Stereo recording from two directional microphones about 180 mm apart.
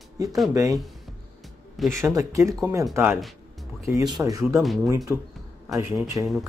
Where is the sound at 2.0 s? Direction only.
15° right (ahead or behind).